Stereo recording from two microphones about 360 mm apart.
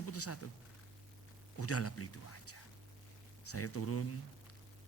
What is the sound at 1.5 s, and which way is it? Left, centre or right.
Speech, left.